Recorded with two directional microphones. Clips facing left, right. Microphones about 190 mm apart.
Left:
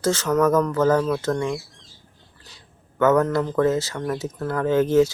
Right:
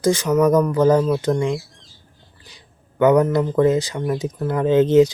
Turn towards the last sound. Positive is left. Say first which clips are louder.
# right 4 dB
turn(degrees=-20)  # may be behind; listen again after turning